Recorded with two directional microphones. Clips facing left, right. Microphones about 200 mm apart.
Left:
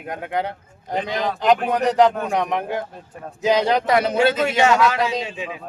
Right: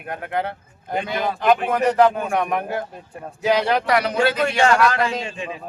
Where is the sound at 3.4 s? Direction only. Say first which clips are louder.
Left 1 dB; 20° left (ahead or behind).